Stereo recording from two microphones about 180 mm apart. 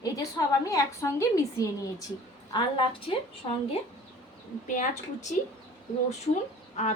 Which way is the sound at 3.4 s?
25° left (ahead or behind).